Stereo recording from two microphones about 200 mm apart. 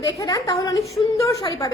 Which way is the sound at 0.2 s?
20° left (ahead or behind).